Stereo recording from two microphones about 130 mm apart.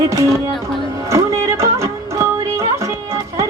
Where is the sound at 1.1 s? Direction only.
20° right (ahead or behind).